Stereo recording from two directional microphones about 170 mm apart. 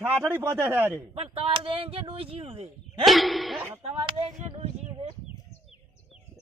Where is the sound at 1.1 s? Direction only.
35° right (ahead or behind).